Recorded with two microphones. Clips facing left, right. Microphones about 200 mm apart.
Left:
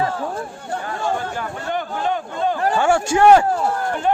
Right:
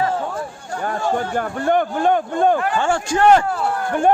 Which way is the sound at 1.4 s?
50° right (ahead or behind).